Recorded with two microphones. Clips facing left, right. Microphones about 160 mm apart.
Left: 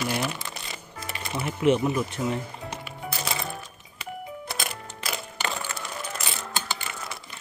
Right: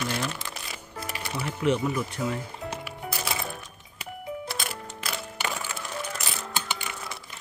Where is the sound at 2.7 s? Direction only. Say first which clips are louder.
Right 1 dB; 5° right (ahead or behind).